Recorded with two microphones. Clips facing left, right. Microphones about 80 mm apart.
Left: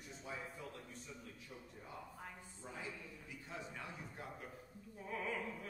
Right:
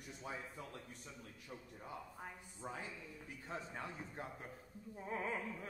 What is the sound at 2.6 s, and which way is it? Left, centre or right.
Speech, right.